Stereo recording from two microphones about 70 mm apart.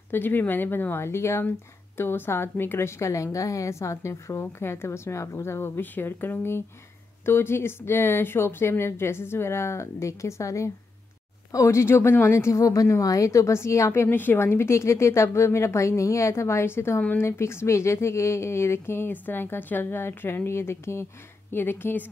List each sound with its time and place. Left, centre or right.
0.1 s a woman's voice: left
14.0 s a woman's voice: left